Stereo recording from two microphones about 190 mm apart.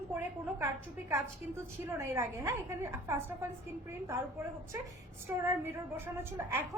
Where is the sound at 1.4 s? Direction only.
10° right (ahead or behind).